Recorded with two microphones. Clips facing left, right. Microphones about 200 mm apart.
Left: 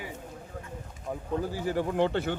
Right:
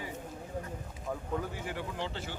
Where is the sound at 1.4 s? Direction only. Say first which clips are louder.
Left 8 dB; 35° left (ahead or behind).